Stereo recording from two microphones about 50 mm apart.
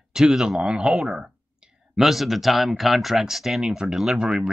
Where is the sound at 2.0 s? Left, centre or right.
Centre.